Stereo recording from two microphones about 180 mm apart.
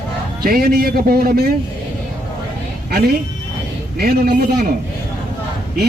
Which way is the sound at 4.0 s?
60° right (ahead or behind).